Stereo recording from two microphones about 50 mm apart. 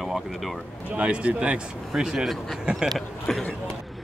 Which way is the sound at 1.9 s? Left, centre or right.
Centre.